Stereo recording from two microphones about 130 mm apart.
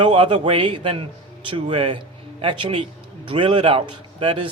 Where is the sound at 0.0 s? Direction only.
40° right (ahead or behind).